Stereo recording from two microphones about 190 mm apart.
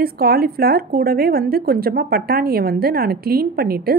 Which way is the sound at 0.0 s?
50° right (ahead or behind).